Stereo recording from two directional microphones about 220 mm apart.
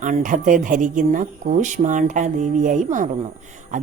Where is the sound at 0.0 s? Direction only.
35° right (ahead or behind).